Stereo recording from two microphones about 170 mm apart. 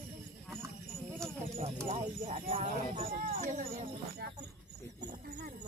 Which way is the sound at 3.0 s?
55° right (ahead or behind).